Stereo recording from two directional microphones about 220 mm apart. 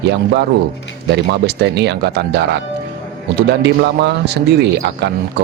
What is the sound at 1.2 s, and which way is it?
A man's voice, 50° right (ahead or behind).